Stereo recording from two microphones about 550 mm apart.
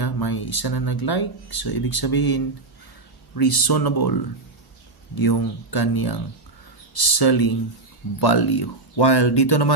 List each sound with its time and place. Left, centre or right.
0.0 s speech: left